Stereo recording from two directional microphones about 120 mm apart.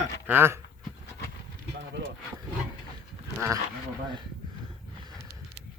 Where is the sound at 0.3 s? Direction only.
20° right (ahead or behind).